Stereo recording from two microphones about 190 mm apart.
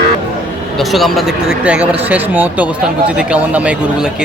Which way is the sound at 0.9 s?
Centre (ahead or behind).